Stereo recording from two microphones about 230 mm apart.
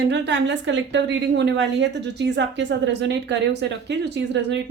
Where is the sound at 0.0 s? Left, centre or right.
Right.